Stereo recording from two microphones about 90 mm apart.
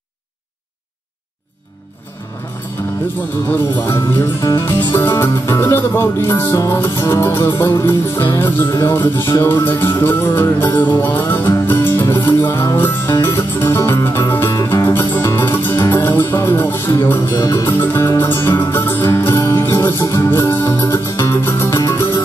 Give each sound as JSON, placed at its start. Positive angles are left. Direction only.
{"t": 2.8, "sound": "music", "side_deg": 25}